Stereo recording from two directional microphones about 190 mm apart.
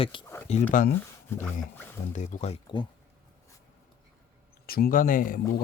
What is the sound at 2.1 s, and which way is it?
Speech, 40° left (ahead or behind).